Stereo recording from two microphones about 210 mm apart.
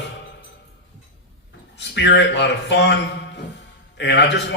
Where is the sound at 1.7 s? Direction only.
55° left (ahead or behind).